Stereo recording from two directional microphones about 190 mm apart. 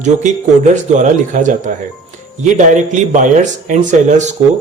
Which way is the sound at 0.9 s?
40° right (ahead or behind).